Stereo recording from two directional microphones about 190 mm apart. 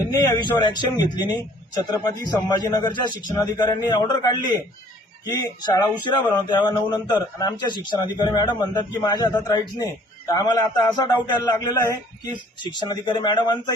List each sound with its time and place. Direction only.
0.0 s a man's voice: 20° left (ahead or behind)